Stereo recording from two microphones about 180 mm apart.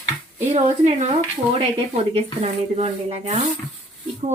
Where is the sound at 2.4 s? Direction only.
40° right (ahead or behind).